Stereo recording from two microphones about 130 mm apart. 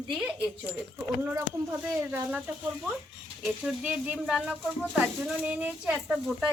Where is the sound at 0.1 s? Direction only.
5° right (ahead or behind).